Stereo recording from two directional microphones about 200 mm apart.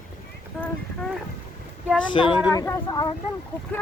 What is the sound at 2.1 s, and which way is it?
Speech, 25° left (ahead or behind).